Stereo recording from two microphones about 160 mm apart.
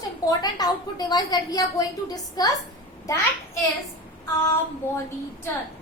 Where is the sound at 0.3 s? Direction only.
25° left (ahead or behind).